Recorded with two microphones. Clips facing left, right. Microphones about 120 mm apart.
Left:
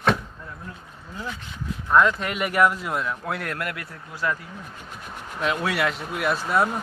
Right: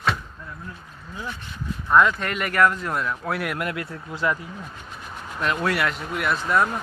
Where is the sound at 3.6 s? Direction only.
20° right (ahead or behind).